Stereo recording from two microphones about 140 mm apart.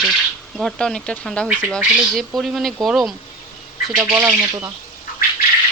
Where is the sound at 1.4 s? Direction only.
10° right (ahead or behind).